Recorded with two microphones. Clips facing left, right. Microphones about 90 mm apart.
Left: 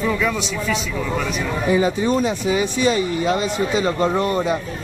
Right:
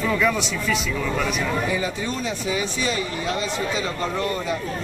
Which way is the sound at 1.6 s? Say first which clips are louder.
Left 8 dB; 30° left (ahead or behind).